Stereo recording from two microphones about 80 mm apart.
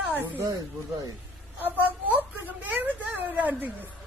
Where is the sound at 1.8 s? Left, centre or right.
Right.